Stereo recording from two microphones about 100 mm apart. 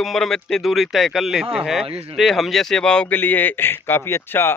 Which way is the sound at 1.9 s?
75° right (ahead or behind).